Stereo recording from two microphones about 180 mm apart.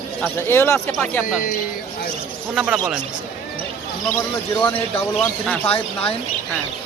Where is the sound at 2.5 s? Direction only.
5° right (ahead or behind).